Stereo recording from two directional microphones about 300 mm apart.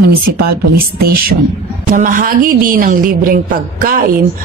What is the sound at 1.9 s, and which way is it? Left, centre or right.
A woman's voice, right.